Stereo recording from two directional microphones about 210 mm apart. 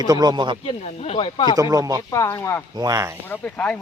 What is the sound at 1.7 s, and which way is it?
Speech, 15° right (ahead or behind).